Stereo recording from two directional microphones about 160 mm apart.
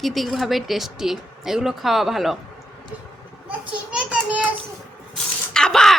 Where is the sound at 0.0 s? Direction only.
Centre (ahead or behind).